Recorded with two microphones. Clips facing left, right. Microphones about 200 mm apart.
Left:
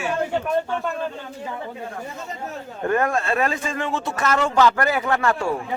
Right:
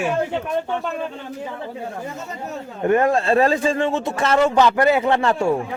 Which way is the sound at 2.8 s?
25° right (ahead or behind).